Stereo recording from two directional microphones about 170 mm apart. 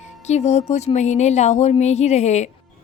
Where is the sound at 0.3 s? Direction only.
40° left (ahead or behind).